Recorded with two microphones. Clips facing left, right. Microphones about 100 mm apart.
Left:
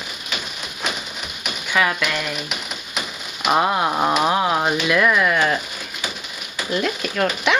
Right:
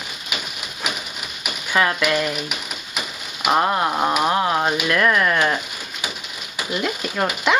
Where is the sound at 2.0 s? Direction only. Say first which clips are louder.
Right 4 dB; 5° right (ahead or behind).